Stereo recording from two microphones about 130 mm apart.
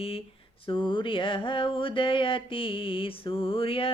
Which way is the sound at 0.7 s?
40° left (ahead or behind).